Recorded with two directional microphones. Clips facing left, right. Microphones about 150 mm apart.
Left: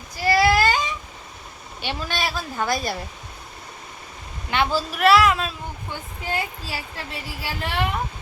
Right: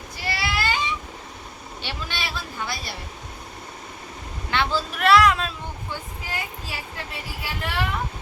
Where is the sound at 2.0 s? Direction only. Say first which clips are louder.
Left 5 dB; 45° left (ahead or behind).